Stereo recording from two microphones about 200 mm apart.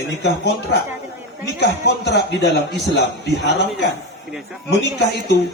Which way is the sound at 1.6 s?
55° left (ahead or behind).